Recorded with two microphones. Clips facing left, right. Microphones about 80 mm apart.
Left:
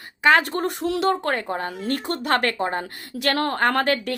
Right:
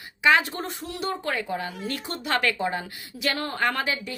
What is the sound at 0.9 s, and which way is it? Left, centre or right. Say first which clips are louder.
Speech: left 10 dB; left.